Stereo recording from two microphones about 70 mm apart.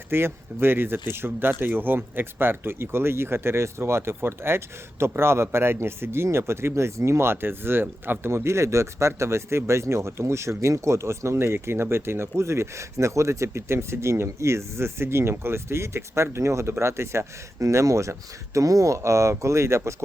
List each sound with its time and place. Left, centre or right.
0.1 s speech: right